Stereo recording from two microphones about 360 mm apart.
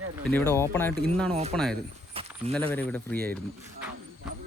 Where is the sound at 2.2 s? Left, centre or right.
Centre.